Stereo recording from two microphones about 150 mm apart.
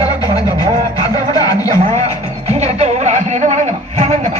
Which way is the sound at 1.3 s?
25° left (ahead or behind).